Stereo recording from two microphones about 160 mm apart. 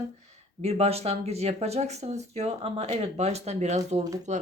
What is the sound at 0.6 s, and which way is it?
Speech, 40° right (ahead or behind).